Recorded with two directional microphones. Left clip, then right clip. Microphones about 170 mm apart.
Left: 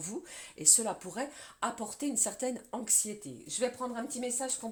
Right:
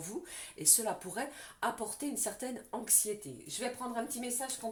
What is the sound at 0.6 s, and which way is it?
Speech, 45° left (ahead or behind).